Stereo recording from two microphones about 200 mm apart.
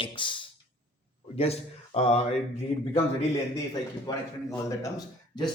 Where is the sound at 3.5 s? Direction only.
20° left (ahead or behind).